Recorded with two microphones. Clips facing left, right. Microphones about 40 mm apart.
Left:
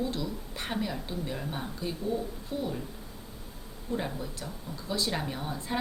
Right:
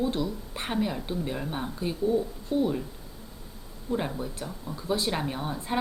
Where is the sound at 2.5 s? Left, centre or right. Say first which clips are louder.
Right 9 dB; right.